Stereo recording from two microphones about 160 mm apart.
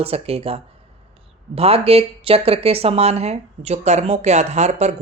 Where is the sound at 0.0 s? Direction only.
40° right (ahead or behind).